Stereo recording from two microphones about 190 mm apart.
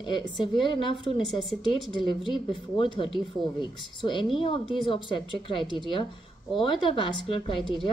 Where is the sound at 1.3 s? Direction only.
Centre (ahead or behind).